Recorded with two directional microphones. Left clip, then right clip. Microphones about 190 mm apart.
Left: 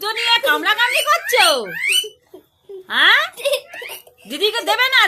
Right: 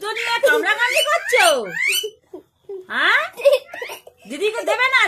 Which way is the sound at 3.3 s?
50° right (ahead or behind).